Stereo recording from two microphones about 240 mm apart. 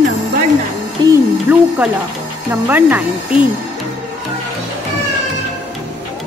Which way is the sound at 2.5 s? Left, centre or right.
Centre.